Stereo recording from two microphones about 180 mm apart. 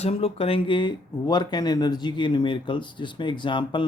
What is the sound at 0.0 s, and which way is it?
Speech, 35° left (ahead or behind).